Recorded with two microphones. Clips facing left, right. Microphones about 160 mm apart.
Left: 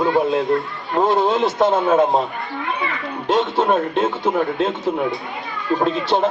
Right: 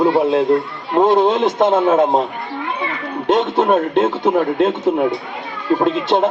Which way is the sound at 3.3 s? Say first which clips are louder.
Right 3 dB; 20° right (ahead or behind).